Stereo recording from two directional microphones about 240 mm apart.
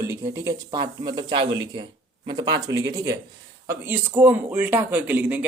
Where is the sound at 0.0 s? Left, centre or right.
Centre.